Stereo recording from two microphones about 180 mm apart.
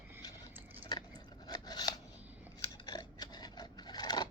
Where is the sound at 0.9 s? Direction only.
20° left (ahead or behind).